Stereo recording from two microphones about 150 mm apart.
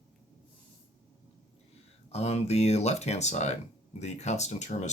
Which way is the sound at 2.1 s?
45° left (ahead or behind).